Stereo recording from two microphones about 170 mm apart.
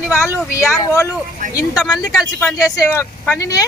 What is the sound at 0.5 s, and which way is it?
Speech, 15° left (ahead or behind).